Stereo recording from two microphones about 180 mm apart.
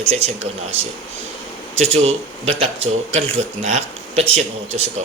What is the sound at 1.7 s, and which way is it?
A man's voice, 35° right (ahead or behind).